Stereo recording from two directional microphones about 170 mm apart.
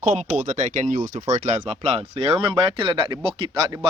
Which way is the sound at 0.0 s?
45° right (ahead or behind).